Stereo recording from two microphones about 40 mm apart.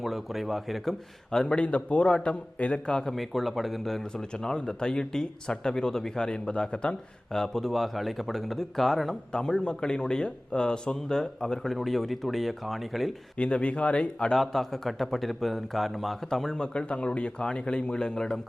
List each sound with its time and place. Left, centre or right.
0.0 s speech: centre
1.3 s speech: centre
1.5 s a man's voice: left
3.0 s speech: centre
4.1 s speech: centre
7.3 s speech: centre
9.3 s speech: centre
13.3 s speech: left
14.3 s speech: centre
16.7 s speech: left